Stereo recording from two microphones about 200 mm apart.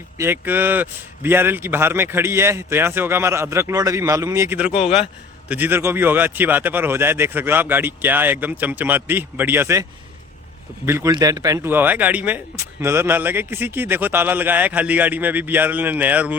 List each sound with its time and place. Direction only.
0.2 s a man's voice: 10° right (ahead or behind)
4.7 s speech: 30° left (ahead or behind)
5.5 s a man's voice: 10° right (ahead or behind)
10.8 s a man's voice: 15° right (ahead or behind)